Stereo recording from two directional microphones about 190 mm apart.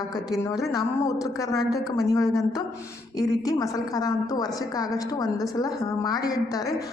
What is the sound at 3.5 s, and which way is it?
A woman's voice, 20° left (ahead or behind).